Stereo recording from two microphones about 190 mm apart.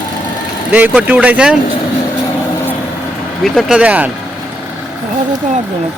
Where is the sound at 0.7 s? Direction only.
5° right (ahead or behind).